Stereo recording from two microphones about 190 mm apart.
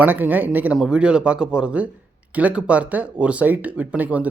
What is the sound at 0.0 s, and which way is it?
Speech, 10° right (ahead or behind).